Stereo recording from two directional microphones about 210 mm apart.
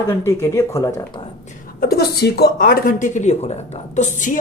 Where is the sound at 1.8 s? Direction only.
50° left (ahead or behind).